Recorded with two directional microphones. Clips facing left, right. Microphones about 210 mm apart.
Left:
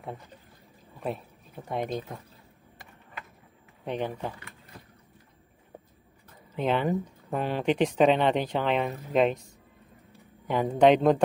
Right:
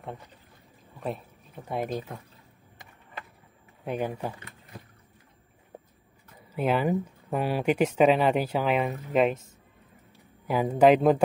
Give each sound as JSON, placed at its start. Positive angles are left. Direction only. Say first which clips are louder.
{"t": 1.7, "sound": "speech", "louder": "even", "side_deg": 0}
{"t": 3.8, "sound": "speech", "louder": "right 1 dB", "side_deg": -10}
{"t": 6.5, "sound": "speech", "louder": "right 1 dB", "side_deg": -10}